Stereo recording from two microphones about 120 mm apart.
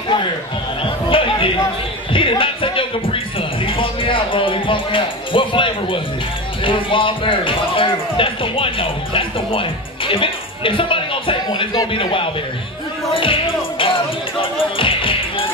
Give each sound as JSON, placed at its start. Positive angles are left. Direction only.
{"t": 0.8, "sound": "chatter", "side_deg": 45}
{"t": 2.1, "sound": "music", "side_deg": 45}
{"t": 6.6, "sound": "speech", "side_deg": 45}
{"t": 11.9, "sound": "speech", "side_deg": 45}
{"t": 13.1, "sound": "music", "side_deg": 45}